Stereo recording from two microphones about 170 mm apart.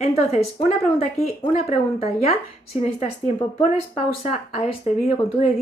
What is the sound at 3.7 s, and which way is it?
Speech, 40° left (ahead or behind).